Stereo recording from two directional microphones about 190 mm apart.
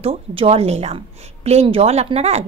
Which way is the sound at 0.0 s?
30° right (ahead or behind).